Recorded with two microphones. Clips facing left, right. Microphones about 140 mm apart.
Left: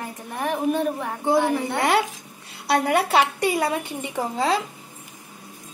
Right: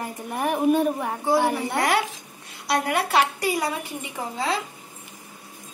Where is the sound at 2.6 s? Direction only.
30° left (ahead or behind).